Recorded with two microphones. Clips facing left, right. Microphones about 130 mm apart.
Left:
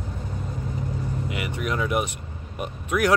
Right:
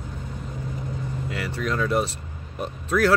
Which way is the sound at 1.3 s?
20° left (ahead or behind).